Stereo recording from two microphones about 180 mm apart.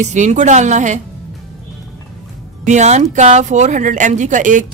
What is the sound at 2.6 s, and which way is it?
Speech, 40° right (ahead or behind).